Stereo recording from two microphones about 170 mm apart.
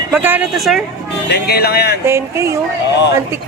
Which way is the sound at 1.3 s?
70° left (ahead or behind).